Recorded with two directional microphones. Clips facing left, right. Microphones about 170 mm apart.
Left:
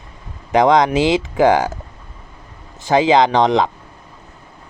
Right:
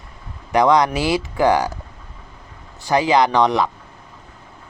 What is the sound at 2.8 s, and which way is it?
Speech, 20° left (ahead or behind).